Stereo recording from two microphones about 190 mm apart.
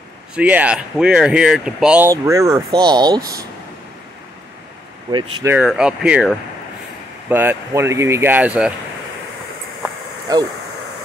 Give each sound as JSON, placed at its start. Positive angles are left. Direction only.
{"t": 0.4, "sound": "speech", "side_deg": -10}
{"t": 5.1, "sound": "speech", "side_deg": -15}
{"t": 5.6, "sound": "speech", "side_deg": -5}